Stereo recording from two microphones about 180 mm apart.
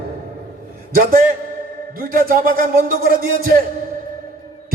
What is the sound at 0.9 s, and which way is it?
Speech, 55° right (ahead or behind).